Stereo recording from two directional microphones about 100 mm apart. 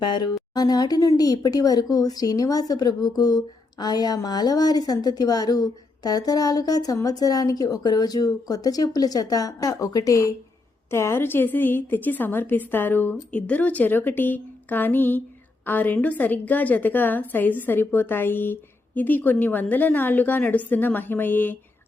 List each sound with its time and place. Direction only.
0.0 s a woman's voice: 45° left (ahead or behind); by 21.6 s 20° left (ahead or behind)